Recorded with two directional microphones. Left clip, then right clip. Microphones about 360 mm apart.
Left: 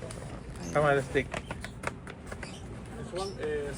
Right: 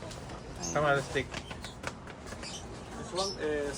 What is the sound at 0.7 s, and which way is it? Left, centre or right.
Speech, left.